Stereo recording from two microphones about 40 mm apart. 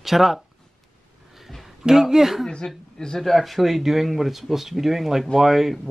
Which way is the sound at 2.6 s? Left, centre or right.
Centre.